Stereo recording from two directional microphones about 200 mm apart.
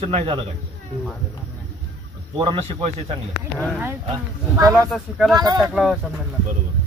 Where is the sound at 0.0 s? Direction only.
30° right (ahead or behind).